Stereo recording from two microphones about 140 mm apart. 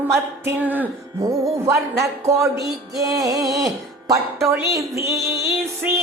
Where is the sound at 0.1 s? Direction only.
15° right (ahead or behind).